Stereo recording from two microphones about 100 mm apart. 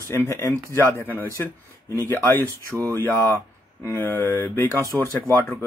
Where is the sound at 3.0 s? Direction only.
25° left (ahead or behind).